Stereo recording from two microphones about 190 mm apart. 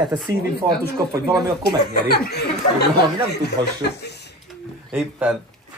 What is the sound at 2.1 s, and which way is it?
Speech, 55° left (ahead or behind).